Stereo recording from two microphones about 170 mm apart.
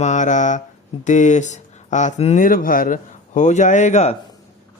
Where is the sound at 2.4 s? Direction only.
55° left (ahead or behind).